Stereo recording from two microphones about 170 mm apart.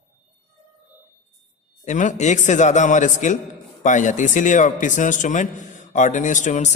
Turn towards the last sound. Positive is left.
turn(degrees=45)  # may be behind; listen again after turning